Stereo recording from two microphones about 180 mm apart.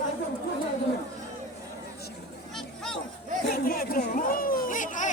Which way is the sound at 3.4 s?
55° left (ahead or behind).